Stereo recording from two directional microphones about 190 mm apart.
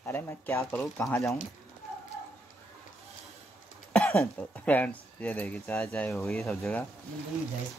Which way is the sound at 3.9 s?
5° left (ahead or behind).